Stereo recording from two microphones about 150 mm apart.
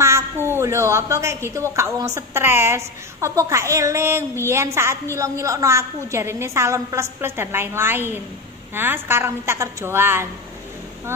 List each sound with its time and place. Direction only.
0.0 s a woman's voice: 15° right (ahead or behind)